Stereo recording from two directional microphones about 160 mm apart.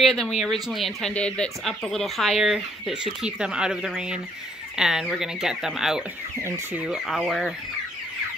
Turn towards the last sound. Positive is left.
turn(degrees=0)  # may be behind; listen again after turning